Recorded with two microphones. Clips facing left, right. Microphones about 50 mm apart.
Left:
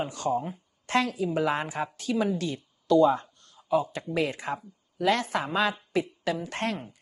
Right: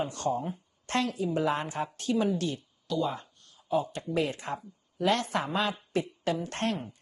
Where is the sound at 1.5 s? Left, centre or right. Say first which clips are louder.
Left 2 dB; centre.